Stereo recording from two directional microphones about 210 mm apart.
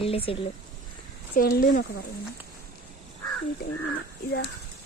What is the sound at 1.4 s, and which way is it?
Speech, 45° left (ahead or behind).